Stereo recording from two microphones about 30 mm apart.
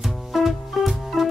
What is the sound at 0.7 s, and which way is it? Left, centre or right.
Music, centre.